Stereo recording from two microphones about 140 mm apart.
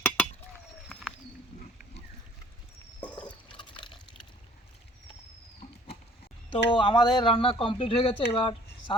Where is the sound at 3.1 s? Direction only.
35° left (ahead or behind).